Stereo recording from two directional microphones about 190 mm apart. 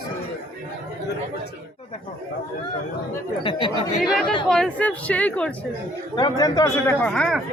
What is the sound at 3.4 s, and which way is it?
Speech, 25° left (ahead or behind).